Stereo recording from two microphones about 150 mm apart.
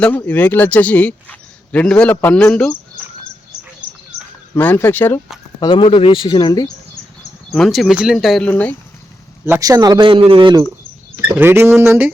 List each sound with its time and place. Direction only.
0.0 s speech: 10° left (ahead or behind)
4.5 s speech: 15° left (ahead or behind)
5.5 s speech: 35° left (ahead or behind)
7.5 s speech: centre (ahead or behind)
8.4 s speech: 10° left (ahead or behind)
9.5 s speech: 25° right (ahead or behind)
11.3 s speech: 15° right (ahead or behind)